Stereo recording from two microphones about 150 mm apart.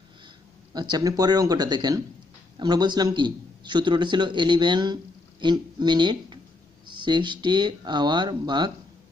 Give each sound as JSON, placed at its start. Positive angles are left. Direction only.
{"t": 0.7, "sound": "a man's voice", "side_deg": -30}